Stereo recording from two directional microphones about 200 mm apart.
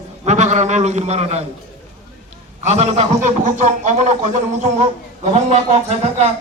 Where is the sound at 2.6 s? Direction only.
30° right (ahead or behind).